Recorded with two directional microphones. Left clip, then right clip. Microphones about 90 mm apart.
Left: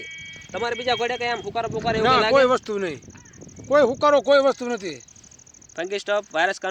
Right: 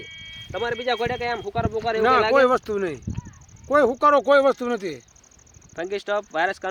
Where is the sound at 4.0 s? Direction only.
40° right (ahead or behind).